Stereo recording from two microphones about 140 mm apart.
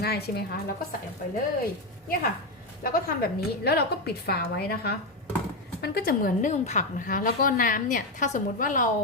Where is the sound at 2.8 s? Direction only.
90° left.